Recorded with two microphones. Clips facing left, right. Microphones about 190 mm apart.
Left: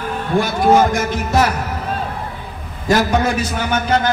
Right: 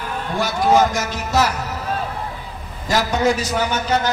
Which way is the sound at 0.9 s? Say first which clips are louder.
Left 3 dB; 55° left (ahead or behind).